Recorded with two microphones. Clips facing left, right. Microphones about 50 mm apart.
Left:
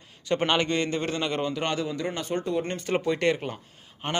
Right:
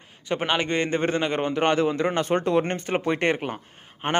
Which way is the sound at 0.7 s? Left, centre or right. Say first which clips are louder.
Right 3 dB; right.